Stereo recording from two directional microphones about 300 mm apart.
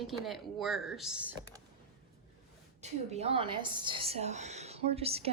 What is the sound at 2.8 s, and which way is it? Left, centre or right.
A woman's voice, right.